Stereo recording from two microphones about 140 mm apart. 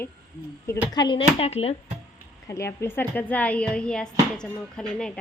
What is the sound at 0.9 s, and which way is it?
Speech, 35° left (ahead or behind).